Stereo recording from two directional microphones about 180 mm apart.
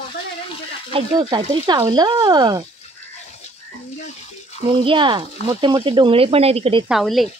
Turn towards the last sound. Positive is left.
turn(degrees=0)  # may be behind; listen again after turning